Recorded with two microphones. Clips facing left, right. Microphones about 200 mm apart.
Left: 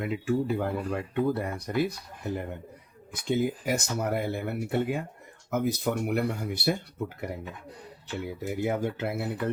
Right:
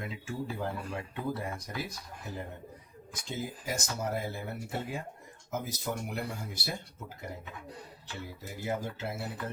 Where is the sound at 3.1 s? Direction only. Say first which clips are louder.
Left 11 dB; 60° left (ahead or behind).